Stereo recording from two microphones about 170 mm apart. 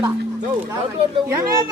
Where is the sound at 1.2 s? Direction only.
20° right (ahead or behind).